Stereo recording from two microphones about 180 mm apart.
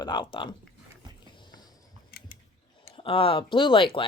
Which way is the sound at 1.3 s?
25° left (ahead or behind).